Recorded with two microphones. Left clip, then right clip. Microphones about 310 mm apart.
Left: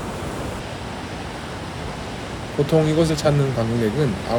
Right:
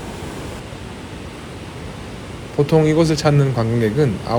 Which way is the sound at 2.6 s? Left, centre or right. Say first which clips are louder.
Right 3 dB; right.